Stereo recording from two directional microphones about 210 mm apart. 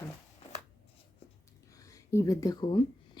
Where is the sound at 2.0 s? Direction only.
15° left (ahead or behind).